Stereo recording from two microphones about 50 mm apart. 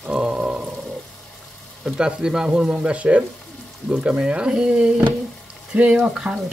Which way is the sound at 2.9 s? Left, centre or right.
Right.